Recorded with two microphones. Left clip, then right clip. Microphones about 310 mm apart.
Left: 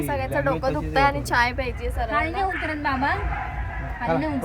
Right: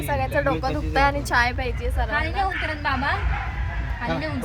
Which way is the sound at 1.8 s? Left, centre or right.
Left.